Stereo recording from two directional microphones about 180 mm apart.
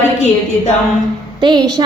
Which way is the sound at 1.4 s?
25° right (ahead or behind).